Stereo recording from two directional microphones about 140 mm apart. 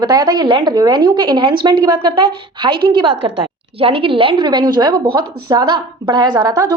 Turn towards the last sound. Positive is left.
turn(degrees=-30)  # may be behind; listen again after turning